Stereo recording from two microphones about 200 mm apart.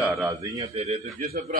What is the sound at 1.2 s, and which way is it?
Speech, 50° right (ahead or behind).